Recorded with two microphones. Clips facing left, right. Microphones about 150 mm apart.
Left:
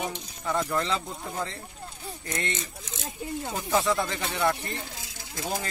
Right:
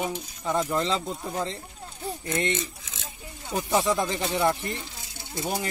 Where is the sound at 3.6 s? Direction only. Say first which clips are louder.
Right 2 dB; 15° right (ahead or behind).